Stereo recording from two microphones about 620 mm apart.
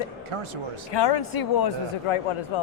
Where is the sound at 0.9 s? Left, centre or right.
Left.